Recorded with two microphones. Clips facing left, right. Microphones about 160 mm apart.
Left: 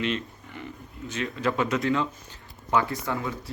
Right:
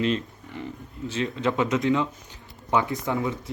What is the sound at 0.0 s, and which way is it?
Speech, 35° right (ahead or behind).